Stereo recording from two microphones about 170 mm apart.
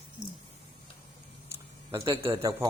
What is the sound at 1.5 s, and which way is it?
Speech, 15° right (ahead or behind).